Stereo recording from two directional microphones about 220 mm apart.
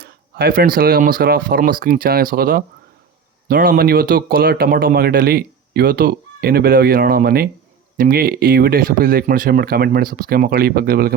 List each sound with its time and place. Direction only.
0.0 s speech: 45° right (ahead or behind)